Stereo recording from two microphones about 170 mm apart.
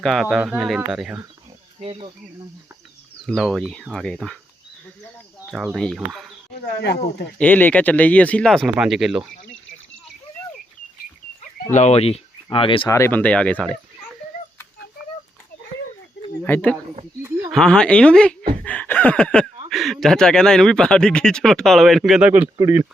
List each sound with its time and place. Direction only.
0.0 s speech: centre (ahead or behind)
1.8 s speech: 30° right (ahead or behind)
3.2 s speech: 5° left (ahead or behind)
5.5 s speech: centre (ahead or behind)
6.8 s speech: 80° left
7.3 s speech: 10° left (ahead or behind)
11.7 s speech: 40° left (ahead or behind)
12.9 s speech: 15° left (ahead or behind)
16.4 s speech: 10° left (ahead or behind); by 22.4 s 10° right (ahead or behind)